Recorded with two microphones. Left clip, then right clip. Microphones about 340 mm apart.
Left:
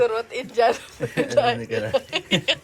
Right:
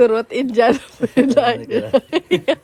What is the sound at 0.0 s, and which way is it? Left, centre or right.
A man's voice, right.